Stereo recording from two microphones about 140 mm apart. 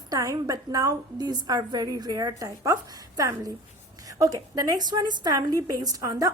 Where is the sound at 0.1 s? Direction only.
25° right (ahead or behind).